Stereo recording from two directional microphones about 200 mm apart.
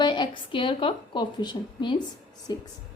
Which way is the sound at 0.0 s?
20° left (ahead or behind).